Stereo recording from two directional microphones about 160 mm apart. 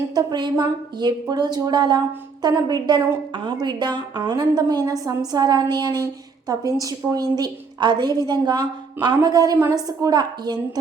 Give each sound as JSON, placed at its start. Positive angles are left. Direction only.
{"t": 0.1, "sound": "a woman's voice", "side_deg": -25}